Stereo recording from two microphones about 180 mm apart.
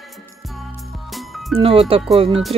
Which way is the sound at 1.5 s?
30° right (ahead or behind).